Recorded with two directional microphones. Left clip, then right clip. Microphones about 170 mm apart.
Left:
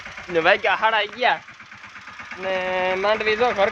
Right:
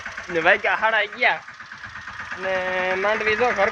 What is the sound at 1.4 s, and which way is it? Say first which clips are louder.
Vehicle: right 3 dB; 45° left (ahead or behind).